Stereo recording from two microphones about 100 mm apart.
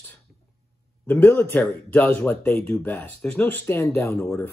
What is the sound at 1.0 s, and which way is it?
Speech, 20° left (ahead or behind).